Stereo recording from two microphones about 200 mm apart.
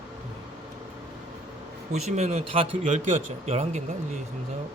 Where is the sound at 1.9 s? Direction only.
35° right (ahead or behind).